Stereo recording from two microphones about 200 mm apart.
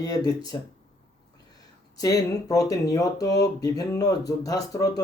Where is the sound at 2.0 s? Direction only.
15° left (ahead or behind).